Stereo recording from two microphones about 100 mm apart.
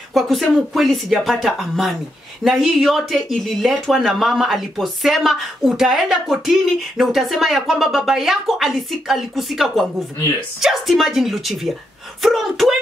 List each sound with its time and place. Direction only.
0.1 s speech: centre (ahead or behind)